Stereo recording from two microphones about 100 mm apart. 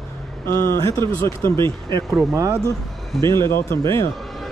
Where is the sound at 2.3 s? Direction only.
35° right (ahead or behind).